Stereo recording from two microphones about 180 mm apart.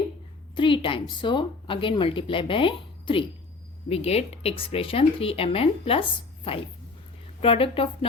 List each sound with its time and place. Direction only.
0.5 s speech: 25° left (ahead or behind)